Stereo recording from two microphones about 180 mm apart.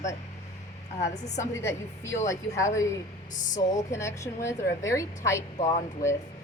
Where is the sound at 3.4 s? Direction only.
45° left (ahead or behind).